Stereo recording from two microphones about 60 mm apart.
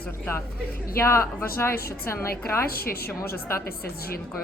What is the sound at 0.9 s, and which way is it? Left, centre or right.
A woman's voice, left.